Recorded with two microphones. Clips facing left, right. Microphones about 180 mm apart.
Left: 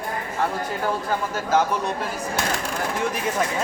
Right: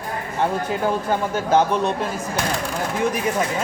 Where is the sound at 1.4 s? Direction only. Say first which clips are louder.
Right 3 dB; 25° right (ahead or behind).